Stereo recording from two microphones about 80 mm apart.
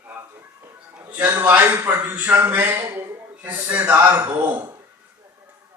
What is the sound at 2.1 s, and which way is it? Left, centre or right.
A man's voice, right.